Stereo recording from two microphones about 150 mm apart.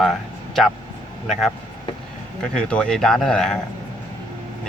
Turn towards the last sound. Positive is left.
turn(degrees=5)  # may be behind; listen again after turning